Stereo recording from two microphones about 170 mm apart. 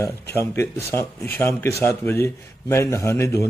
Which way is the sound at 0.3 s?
15° left (ahead or behind).